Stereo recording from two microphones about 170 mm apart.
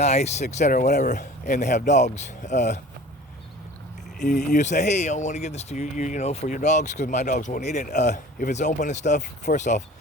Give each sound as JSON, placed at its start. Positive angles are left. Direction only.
{"t": 0.0, "sound": "speech", "side_deg": 40}
{"t": 4.2, "sound": "speech", "side_deg": 50}